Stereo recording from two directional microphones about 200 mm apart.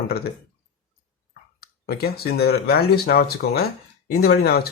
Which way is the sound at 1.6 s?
50° left (ahead or behind).